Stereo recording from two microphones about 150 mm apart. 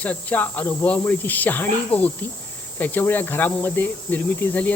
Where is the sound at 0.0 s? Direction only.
10° left (ahead or behind).